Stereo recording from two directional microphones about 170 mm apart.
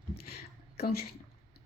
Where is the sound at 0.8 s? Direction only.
65° left (ahead or behind).